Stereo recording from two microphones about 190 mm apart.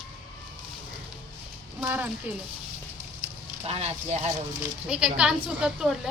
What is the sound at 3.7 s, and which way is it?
Speech, 35° right (ahead or behind).